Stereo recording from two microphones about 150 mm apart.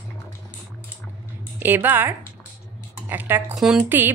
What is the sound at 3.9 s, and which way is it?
Speech, 15° right (ahead or behind).